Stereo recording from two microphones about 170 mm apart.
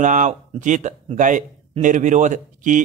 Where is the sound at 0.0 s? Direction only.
45° right (ahead or behind).